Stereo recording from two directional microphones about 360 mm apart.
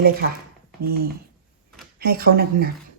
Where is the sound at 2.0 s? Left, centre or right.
Right.